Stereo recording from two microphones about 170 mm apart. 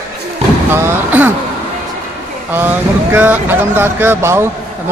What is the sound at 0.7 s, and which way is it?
Speech, 10° right (ahead or behind).